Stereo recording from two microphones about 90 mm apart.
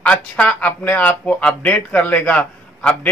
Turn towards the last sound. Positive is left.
turn(degrees=15)  # may be behind; listen again after turning